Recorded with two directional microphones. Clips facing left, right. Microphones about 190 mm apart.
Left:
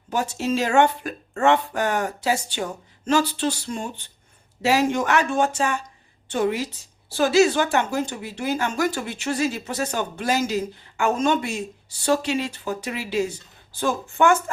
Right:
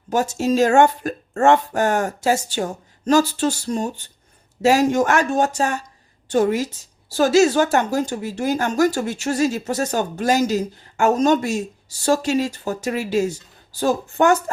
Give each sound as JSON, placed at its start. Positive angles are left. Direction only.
{"t": 0.1, "sound": "a woman's voice", "side_deg": -45}